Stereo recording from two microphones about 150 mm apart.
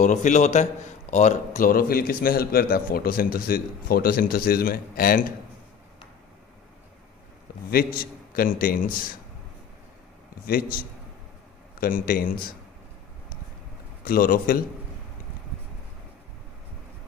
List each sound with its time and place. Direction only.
0.0 s a man's voice: 55° left (ahead or behind); by 5.2 s 75° left (ahead or behind)
7.7 s a man's voice: 75° left (ahead or behind)
10.4 s a man's voice: 80° left
11.8 s a man's voice: 70° left (ahead or behind)
14.0 s a man's voice: 75° left (ahead or behind)